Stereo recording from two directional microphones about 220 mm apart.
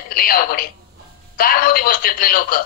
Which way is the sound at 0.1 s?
40° left (ahead or behind).